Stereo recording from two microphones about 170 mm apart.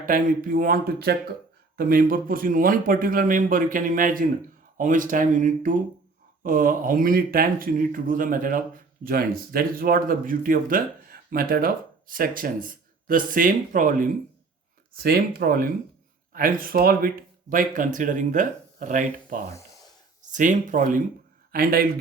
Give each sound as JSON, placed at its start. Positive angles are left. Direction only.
{"t": 0.0, "sound": "speech", "side_deg": -55}